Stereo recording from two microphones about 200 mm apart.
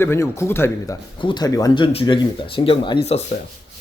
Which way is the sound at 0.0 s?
10° left (ahead or behind).